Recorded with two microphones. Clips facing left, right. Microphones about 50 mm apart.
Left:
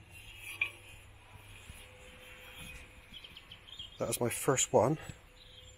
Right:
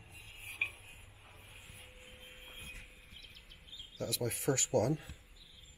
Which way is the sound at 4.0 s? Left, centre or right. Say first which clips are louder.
Left 4 dB; left.